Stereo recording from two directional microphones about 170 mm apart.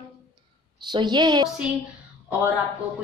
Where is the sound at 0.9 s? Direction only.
25° right (ahead or behind).